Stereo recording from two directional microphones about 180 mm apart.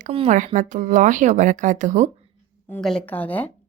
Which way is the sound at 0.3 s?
45° right (ahead or behind).